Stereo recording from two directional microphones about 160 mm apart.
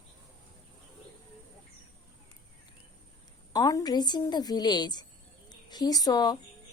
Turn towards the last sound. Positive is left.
turn(degrees=25)  # may be behind; listen again after turning